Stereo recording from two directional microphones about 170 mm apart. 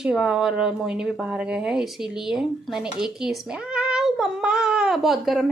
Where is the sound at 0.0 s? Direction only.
5° right (ahead or behind).